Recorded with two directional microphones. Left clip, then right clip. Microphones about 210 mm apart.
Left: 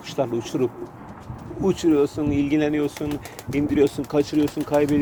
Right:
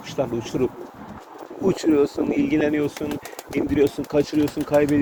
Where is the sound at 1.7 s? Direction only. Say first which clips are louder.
Even; 15° left (ahead or behind).